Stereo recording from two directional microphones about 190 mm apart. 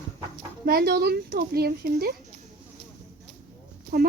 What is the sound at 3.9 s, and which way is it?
Speech, 50° right (ahead or behind).